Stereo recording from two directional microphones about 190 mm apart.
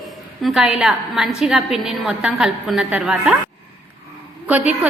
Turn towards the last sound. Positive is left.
turn(degrees=-10)  # may be behind; listen again after turning